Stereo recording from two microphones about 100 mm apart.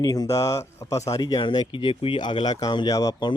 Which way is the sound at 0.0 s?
40° left (ahead or behind).